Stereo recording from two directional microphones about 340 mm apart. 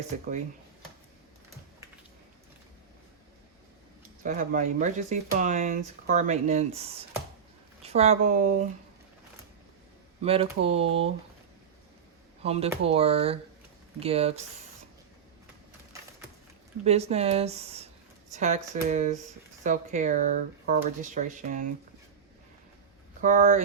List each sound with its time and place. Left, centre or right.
4.2 s speech: right
10.2 s speech: centre
12.4 s speech: centre
16.8 s speech: centre
23.2 s speech: right